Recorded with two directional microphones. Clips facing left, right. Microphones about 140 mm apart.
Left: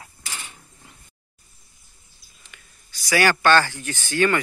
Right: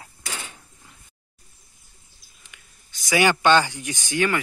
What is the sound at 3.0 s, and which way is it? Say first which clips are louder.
Speech: even; 20° right (ahead or behind).